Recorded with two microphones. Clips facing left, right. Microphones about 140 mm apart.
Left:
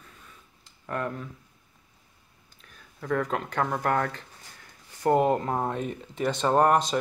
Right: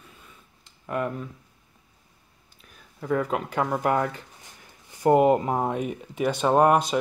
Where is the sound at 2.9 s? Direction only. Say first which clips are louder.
Right 2 dB; 10° right (ahead or behind).